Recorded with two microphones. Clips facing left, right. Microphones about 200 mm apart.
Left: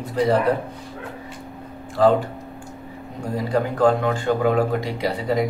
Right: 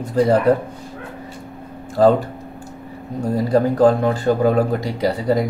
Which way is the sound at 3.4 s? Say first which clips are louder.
Right 4 dB; 40° right (ahead or behind).